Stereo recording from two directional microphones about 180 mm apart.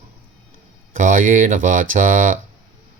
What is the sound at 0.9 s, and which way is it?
Speech, 45° right (ahead or behind).